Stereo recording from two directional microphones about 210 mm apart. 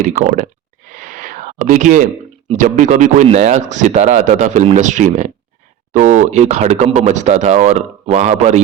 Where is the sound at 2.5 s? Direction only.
35° right (ahead or behind).